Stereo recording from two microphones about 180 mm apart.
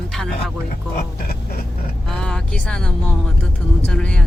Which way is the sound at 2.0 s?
5° left (ahead or behind).